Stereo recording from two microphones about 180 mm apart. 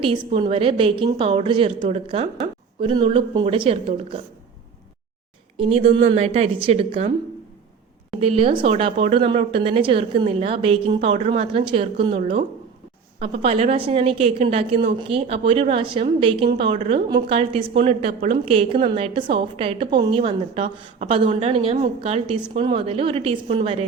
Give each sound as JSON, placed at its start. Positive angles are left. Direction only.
{"t": 0.0, "sound": "a woman's voice", "side_deg": -30}
{"t": 5.5, "sound": "a woman's voice", "side_deg": -30}
{"t": 8.2, "sound": "a woman's voice", "side_deg": -35}
{"t": 16.7, "sound": "a woman's voice", "side_deg": -40}
{"t": 17.1, "sound": "a woman's voice", "side_deg": -30}